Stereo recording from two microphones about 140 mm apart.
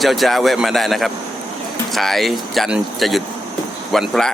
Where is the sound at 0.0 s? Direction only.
Centre (ahead or behind).